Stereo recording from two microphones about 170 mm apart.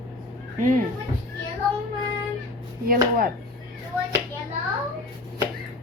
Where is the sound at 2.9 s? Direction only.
60° right (ahead or behind).